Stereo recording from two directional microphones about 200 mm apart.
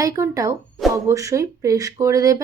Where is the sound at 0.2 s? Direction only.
15° right (ahead or behind).